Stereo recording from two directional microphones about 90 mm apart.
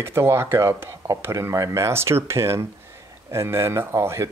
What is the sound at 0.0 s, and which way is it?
Speech, 30° right (ahead or behind).